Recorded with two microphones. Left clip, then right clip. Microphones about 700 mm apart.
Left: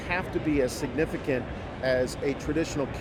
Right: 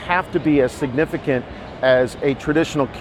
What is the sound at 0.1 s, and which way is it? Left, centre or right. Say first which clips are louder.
Speech: right 10 dB; right.